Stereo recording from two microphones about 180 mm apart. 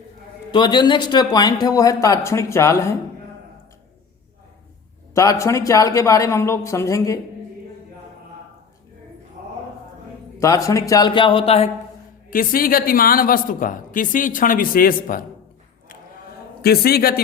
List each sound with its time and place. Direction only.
0.5 s speech: 25° left (ahead or behind)
5.1 s speech: 15° left (ahead or behind)
10.4 s speech: 20° left (ahead or behind); by 11.7 s 35° left (ahead or behind)
12.3 s a woman's voice: 50° left (ahead or behind)
16.6 s a man's voice: 60° left (ahead or behind)